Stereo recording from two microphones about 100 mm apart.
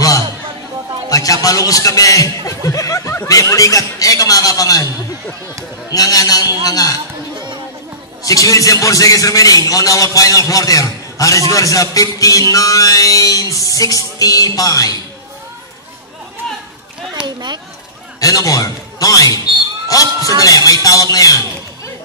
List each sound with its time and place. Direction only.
1.1 s a man's voice: 35° left (ahead or behind)
5.9 s a man's voice: 35° left (ahead or behind)
8.2 s a man's voice: 35° left (ahead or behind)
17.2 s a sound: 10° right (ahead or behind)
18.2 s a man's voice: 35° left (ahead or behind)